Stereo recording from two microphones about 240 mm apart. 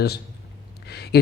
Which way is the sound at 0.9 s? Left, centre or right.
Left.